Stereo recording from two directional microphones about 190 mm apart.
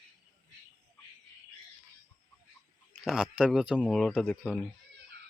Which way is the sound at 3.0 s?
5° right (ahead or behind).